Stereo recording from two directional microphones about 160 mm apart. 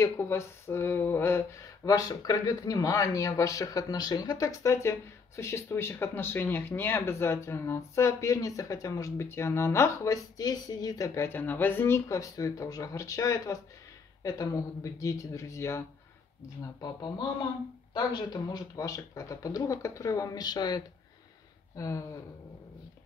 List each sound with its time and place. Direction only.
0.0 s speech: 15° left (ahead or behind)
16.8 s speech: 25° left (ahead or behind)